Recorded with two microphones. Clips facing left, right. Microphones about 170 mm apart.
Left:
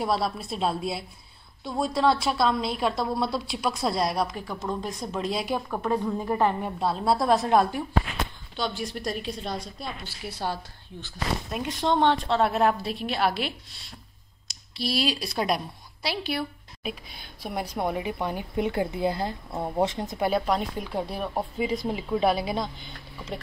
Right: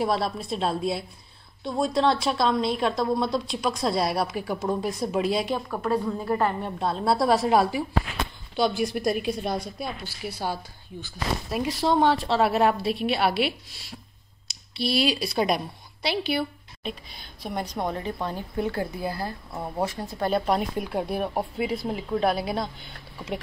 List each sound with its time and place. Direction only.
0.0 s a woman's voice: centre (ahead or behind)
6.0 s speech: 15° left (ahead or behind)
6.8 s a woman's voice: centre (ahead or behind); by 20.2 s 20° left (ahead or behind)
20.2 s speech: centre (ahead or behind)
21.8 s a woman's voice: 5° left (ahead or behind)